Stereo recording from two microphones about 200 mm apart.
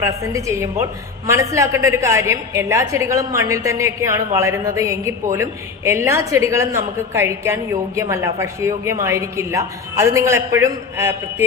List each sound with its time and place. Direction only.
0.0 s a woman's voice: 15° right (ahead or behind)